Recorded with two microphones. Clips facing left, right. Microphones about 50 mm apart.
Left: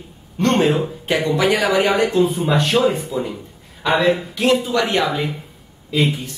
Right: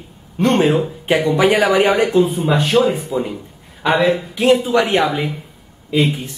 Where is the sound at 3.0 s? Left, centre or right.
Centre.